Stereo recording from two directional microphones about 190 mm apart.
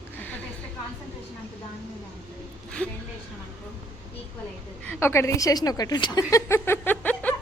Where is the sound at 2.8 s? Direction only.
10° left (ahead or behind).